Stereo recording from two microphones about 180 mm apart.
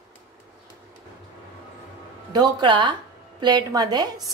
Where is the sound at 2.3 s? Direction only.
25° right (ahead or behind).